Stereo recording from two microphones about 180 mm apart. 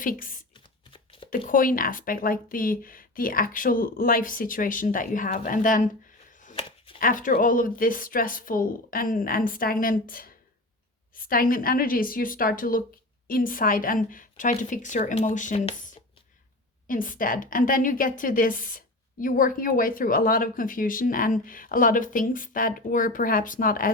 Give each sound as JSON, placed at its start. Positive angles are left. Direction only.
{"t": 0.0, "sound": "speech", "side_deg": 50}
{"t": 0.5, "sound": "a sound", "side_deg": 30}
{"t": 1.5, "sound": "speech", "side_deg": 50}
{"t": 6.4, "sound": "chopping", "side_deg": 30}
{"t": 7.0, "sound": "speech", "side_deg": 45}
{"t": 16.8, "sound": "speech", "side_deg": 50}